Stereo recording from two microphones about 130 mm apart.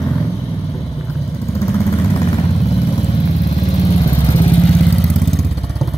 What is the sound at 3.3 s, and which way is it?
Vehicle, 60° left (ahead or behind).